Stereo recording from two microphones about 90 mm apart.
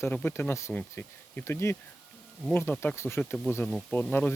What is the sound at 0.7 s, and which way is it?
Speech, 20° left (ahead or behind).